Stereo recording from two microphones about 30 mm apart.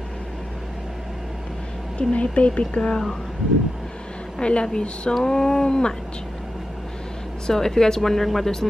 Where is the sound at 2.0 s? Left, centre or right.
Left.